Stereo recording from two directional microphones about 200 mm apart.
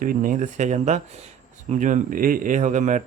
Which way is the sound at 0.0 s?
45° right (ahead or behind).